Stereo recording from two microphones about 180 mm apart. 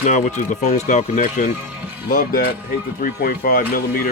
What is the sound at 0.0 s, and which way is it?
Speech, 45° left (ahead or behind).